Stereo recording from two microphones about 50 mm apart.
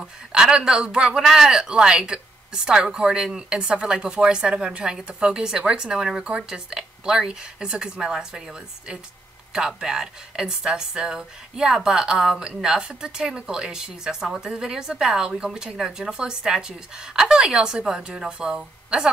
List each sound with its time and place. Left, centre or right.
0.0 s speech: centre
9.5 s speech: centre